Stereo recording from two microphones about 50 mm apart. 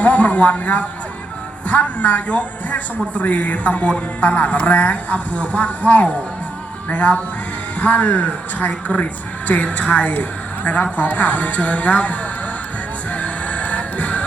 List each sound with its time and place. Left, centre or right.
0.0 s speech: left
13.1 s music: left